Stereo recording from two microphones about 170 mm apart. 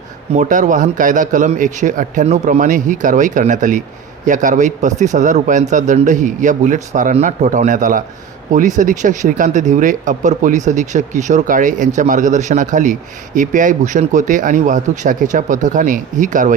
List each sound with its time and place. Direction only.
0.3 s speech: 45° right (ahead or behind)